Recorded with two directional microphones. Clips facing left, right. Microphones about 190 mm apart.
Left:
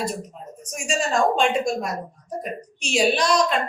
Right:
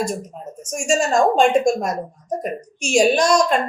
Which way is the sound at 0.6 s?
45° right (ahead or behind).